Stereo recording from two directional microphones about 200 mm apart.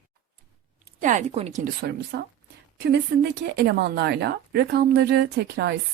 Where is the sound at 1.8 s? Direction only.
55° right (ahead or behind).